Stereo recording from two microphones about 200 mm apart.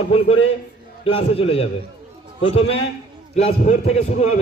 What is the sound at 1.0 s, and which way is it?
A man's voice, 30° left (ahead or behind).